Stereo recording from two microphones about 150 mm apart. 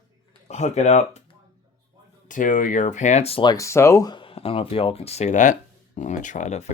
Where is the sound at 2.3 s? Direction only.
60° left (ahead or behind).